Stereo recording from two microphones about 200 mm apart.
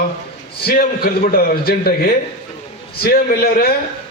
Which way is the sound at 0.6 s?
50° left (ahead or behind).